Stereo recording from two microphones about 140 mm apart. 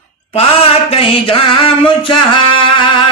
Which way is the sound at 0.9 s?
45° left (ahead or behind).